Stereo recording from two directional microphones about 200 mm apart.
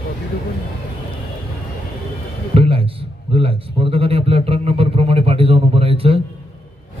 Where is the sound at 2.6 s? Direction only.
30° right (ahead or behind).